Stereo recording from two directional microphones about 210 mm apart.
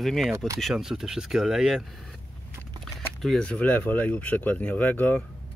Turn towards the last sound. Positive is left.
turn(degrees=10)  # may be behind; listen again after turning